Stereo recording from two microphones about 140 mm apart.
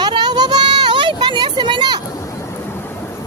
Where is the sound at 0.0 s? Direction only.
30° right (ahead or behind).